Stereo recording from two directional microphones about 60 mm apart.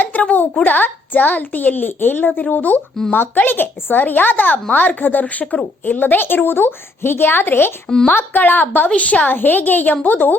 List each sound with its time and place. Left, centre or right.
0.0 s a child's voice: left